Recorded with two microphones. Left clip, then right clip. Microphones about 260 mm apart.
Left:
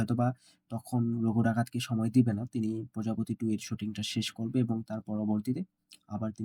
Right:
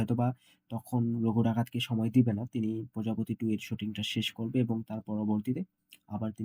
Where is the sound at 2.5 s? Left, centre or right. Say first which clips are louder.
Left 1 dB; left.